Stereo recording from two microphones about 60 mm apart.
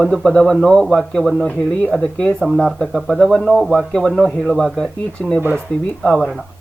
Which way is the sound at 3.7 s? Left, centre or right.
Centre.